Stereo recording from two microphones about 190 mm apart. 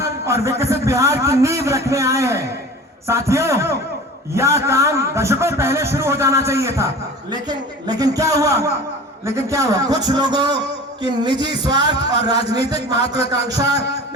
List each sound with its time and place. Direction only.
0.3 s a man's voice: 15° right (ahead or behind)